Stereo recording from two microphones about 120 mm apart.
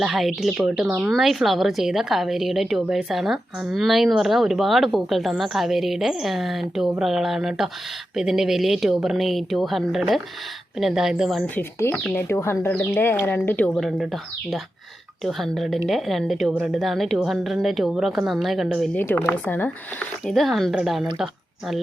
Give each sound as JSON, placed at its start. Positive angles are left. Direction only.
{"t": 0.0, "sound": "a woman's voice", "side_deg": 0}
{"t": 11.4, "sound": "speech", "side_deg": 15}
{"t": 13.7, "sound": "a woman's voice", "side_deg": 0}
{"t": 18.9, "sound": "speech", "side_deg": 15}
{"t": 20.2, "sound": "a woman's voice", "side_deg": 0}